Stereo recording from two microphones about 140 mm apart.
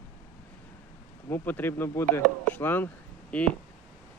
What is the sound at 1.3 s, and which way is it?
Speech, 15° left (ahead or behind).